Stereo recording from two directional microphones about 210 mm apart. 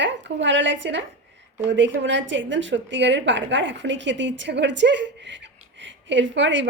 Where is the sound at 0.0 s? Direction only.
55° right (ahead or behind).